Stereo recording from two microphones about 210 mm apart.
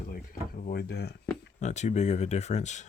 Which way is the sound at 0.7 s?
50° left (ahead or behind).